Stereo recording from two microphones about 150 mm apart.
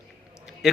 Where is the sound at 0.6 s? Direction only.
5° right (ahead or behind).